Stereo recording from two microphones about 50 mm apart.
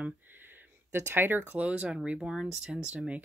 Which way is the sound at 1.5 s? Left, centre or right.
Right.